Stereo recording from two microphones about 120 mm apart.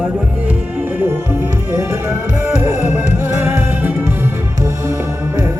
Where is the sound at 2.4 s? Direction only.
20° right (ahead or behind).